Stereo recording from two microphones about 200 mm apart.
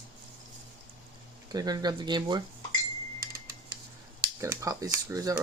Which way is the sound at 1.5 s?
20° right (ahead or behind).